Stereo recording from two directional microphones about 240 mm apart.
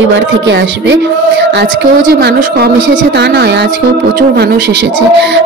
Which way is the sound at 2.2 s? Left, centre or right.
Right.